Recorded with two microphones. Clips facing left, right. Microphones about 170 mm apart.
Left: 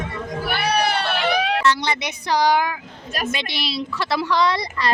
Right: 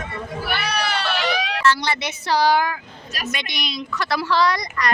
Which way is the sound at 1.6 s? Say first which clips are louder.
Even; 20° left (ahead or behind).